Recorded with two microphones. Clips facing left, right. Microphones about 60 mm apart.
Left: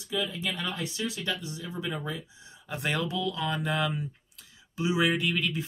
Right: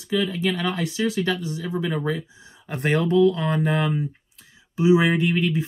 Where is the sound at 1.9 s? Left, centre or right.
Right.